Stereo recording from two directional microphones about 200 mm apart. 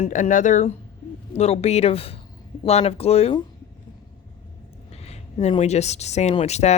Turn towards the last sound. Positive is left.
turn(degrees=35)  # may be behind; listen again after turning